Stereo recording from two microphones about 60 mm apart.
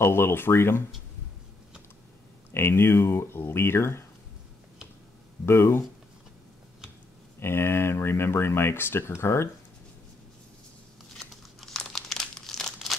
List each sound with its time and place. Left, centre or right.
0.0 s speech: left
2.5 s speech: left
5.4 s speech: left
7.3 s speech: left
11.1 s crumpling: centre